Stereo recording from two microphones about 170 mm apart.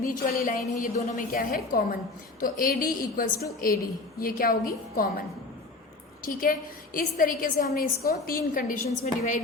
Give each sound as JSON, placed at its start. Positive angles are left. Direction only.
{"t": 0.0, "sound": "a woman's voice", "side_deg": 60}
{"t": 6.2, "sound": "a woman's voice", "side_deg": 55}